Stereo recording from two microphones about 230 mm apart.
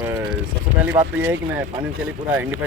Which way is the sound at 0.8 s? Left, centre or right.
Centre.